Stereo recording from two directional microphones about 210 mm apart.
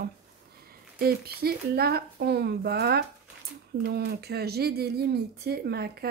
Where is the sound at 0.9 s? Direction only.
45° right (ahead or behind).